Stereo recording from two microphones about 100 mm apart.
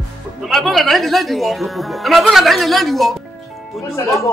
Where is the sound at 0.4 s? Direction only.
Centre (ahead or behind).